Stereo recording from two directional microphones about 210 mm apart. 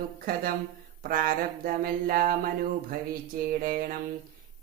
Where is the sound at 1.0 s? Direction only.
45° right (ahead or behind).